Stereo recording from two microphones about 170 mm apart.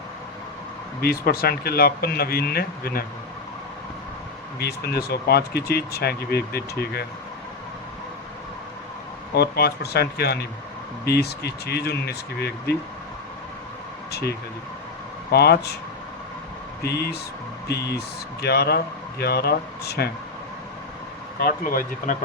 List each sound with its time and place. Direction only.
1.0 s speech: 60° left (ahead or behind)
4.6 s speech: 70° left (ahead or behind)
9.3 s speech: 70° left (ahead or behind)
14.1 s speech: 70° left (ahead or behind)
16.8 s speech: 70° left (ahead or behind)
21.3 s speech: 55° left (ahead or behind)